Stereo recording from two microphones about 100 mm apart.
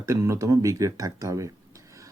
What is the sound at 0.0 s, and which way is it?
Speech, 30° right (ahead or behind).